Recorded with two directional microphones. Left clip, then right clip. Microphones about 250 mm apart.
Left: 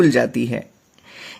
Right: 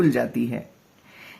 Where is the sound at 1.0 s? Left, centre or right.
Left.